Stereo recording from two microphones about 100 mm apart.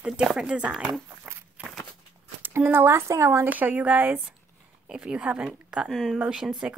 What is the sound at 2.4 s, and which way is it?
Speech, 20° right (ahead or behind).